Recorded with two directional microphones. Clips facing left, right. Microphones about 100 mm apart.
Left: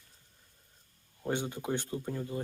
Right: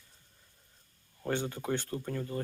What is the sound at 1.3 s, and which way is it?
Speech, 15° left (ahead or behind).